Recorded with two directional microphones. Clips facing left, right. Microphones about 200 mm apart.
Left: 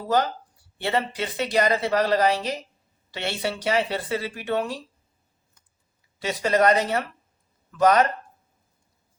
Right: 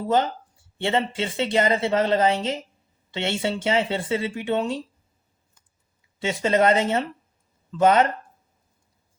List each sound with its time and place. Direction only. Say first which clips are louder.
0.1 s speech: even; 25° right (ahead or behind)
6.1 s speech: right 1 dB; 25° right (ahead or behind)